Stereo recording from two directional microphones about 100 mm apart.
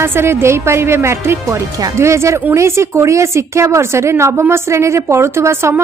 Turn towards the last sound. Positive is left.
turn(degrees=-25)  # may be behind; listen again after turning